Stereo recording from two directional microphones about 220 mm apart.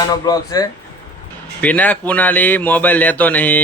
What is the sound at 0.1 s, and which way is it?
Speech, 15° left (ahead or behind).